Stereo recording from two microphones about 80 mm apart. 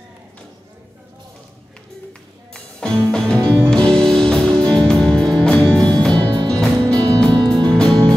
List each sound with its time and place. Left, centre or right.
2.5 s music: centre
6.2 s music: right
6.6 s music: centre